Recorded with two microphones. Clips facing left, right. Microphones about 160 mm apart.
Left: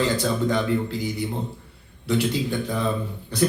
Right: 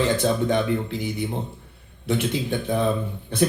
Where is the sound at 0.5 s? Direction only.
20° right (ahead or behind).